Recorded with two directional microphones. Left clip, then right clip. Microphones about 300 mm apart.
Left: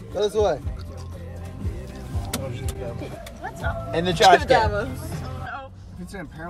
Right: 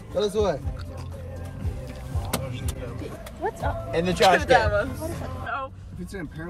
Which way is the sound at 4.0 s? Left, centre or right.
Left.